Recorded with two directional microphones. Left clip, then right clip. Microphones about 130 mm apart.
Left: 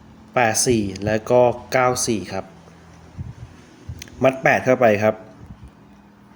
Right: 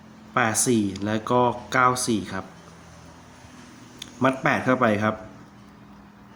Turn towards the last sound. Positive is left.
turn(degrees=45)  # may be behind; listen again after turning